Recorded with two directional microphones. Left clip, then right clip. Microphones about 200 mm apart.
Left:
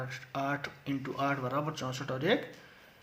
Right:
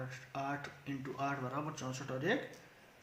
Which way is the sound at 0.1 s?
40° left (ahead or behind).